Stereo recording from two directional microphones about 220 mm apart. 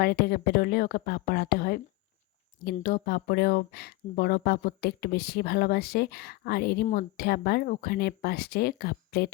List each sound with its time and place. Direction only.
0.0 s speech: 45° left (ahead or behind)